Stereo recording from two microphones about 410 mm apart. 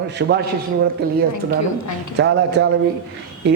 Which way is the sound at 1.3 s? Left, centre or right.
Left.